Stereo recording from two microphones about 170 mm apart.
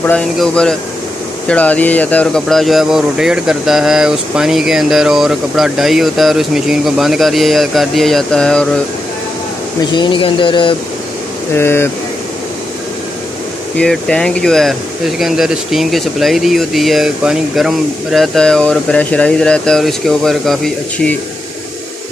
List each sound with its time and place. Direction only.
0.0 s speech: 5° left (ahead or behind)
9.9 s a sound: 30° left (ahead or behind)
11.5 s speech: 15° left (ahead or behind)
13.7 s speech: 5° left (ahead or behind)